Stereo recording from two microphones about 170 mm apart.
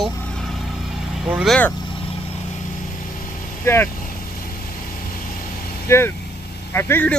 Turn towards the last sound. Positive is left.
turn(degrees=15)  # may be behind; listen again after turning